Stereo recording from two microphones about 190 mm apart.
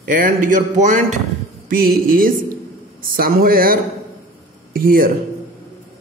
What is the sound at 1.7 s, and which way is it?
Music, 50° right (ahead or behind).